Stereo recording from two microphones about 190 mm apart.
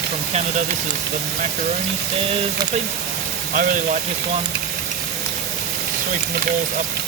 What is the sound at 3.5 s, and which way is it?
Speech, 45° right (ahead or behind).